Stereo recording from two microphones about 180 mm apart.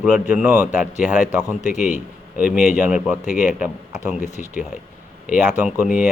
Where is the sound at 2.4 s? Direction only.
10° right (ahead or behind).